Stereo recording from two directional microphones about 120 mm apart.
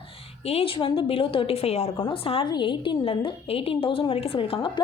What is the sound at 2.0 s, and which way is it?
A woman's voice, 50° left (ahead or behind).